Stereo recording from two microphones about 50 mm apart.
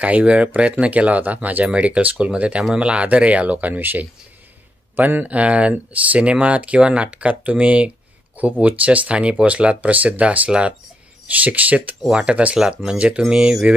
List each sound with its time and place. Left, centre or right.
0.0 s speech: right
5.2 s speech: right
12.1 s speech: centre